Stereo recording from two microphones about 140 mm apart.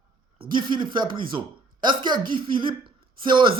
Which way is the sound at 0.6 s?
35° right (ahead or behind).